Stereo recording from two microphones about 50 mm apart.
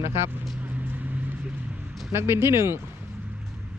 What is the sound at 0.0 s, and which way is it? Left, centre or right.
Speech, right.